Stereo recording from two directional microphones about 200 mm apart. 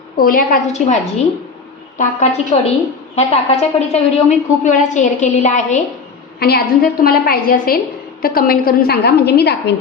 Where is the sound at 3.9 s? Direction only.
30° left (ahead or behind).